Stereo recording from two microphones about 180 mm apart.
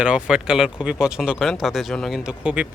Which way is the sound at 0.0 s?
5° right (ahead or behind).